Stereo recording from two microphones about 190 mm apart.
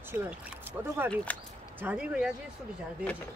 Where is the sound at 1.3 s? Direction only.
10° left (ahead or behind).